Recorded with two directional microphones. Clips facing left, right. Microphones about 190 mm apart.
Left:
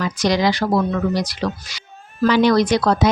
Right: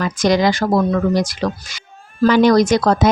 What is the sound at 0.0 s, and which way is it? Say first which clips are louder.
Speech: right 3 dB; 50° right (ahead or behind).